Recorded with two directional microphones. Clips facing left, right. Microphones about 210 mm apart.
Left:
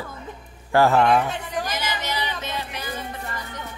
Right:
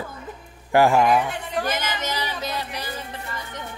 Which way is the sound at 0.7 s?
15° right (ahead or behind).